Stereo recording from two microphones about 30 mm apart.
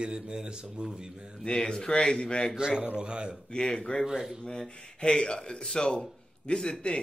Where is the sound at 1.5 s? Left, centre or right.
Left.